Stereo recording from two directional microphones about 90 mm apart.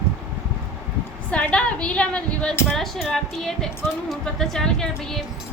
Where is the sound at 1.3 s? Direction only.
15° left (ahead or behind).